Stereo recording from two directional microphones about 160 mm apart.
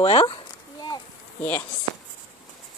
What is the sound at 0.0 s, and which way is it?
Speech, 40° left (ahead or behind).